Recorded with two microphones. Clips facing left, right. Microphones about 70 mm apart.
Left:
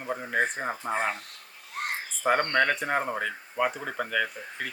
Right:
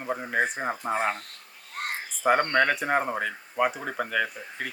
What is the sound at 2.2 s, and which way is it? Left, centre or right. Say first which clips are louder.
Speech: right 2 dB; centre.